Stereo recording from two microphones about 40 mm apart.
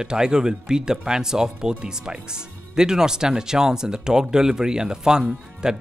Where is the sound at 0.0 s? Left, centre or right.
Centre.